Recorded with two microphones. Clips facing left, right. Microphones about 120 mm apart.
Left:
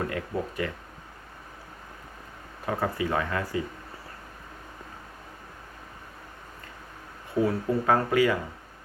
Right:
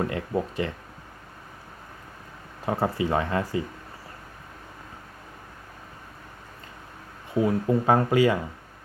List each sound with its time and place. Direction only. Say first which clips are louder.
0.1 s speech: right 3 dB; 25° right (ahead or behind)
2.6 s speech: right 3 dB; 25° right (ahead or behind)
7.4 s speech: right 3 dB; 25° right (ahead or behind)